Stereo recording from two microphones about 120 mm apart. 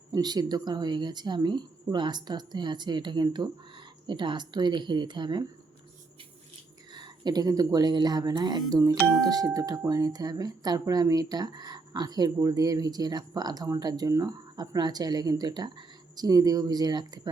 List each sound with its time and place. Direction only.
0.1 s speech: 35° right (ahead or behind)
6.9 s speech: 35° right (ahead or behind)
8.7 s speech: 25° right (ahead or behind)